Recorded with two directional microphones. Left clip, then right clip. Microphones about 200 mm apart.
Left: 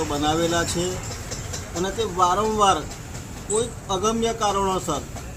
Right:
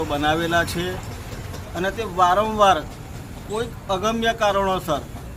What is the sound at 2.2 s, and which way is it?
Speech, 10° right (ahead or behind).